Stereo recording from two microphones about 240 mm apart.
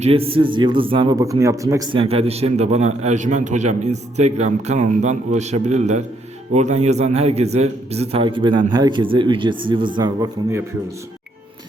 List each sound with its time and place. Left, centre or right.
0.0 s a man's voice: right